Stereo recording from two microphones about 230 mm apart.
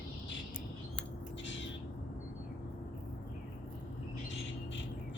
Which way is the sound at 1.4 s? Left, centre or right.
Left.